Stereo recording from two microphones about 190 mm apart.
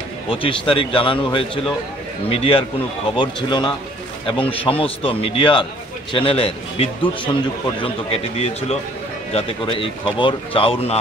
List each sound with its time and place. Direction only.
0.3 s a man's voice: 30° left (ahead or behind)